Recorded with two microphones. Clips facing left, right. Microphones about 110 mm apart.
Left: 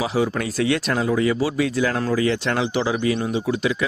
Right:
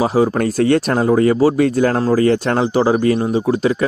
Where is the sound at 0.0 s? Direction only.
40° right (ahead or behind).